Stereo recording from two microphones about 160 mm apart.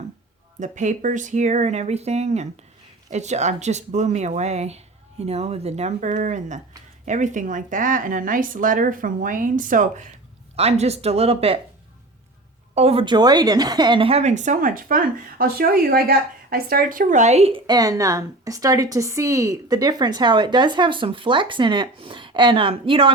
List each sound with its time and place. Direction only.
0.6 s a woman's voice: 50° right (ahead or behind)
10.5 s speech: 40° right (ahead or behind)
12.7 s a woman's voice: 40° right (ahead or behind)
17.7 s a woman's voice: 20° right (ahead or behind)